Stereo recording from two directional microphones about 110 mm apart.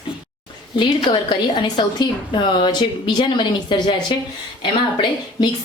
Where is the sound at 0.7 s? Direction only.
50° left (ahead or behind).